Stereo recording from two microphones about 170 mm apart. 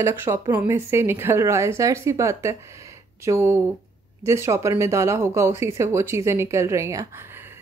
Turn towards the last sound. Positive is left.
turn(degrees=-15)  # may be behind; listen again after turning